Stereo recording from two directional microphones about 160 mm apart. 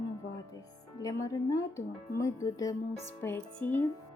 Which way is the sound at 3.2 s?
15° left (ahead or behind).